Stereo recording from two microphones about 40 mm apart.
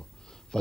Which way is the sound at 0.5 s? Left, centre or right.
Centre.